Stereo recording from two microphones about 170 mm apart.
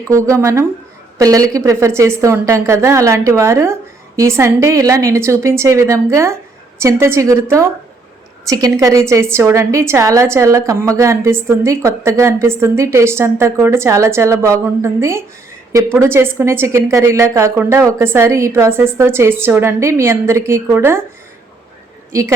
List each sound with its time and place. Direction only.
0.1 s a woman's voice: 15° right (ahead or behind)